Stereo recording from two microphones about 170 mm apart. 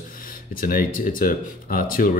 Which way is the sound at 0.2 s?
55° left (ahead or behind).